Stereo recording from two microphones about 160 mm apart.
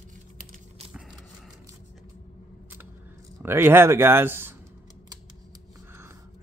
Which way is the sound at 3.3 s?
15° right (ahead or behind).